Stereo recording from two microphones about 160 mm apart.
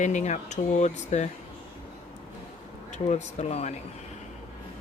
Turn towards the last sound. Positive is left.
turn(degrees=45)  # may be behind; listen again after turning